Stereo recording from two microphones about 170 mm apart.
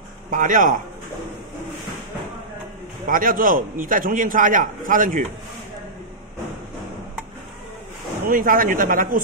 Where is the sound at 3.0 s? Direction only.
55° right (ahead or behind).